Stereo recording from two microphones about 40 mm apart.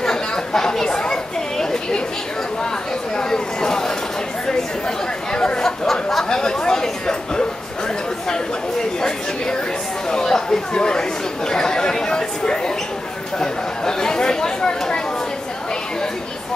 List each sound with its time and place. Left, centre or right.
0.0 s chatter: centre
3.2 s chatter: centre
5.3 s chatter: left
5.6 s chatter: centre
10.1 s chatter: centre